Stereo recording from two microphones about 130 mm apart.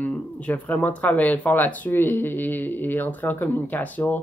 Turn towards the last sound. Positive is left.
turn(degrees=15)  # may be behind; listen again after turning